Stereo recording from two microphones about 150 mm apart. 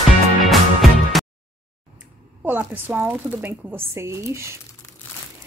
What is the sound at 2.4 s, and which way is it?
A woman's voice, 15° right (ahead or behind).